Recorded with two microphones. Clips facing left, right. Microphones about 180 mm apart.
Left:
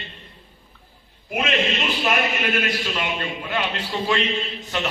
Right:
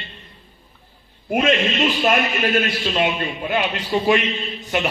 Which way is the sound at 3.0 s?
15° right (ahead or behind).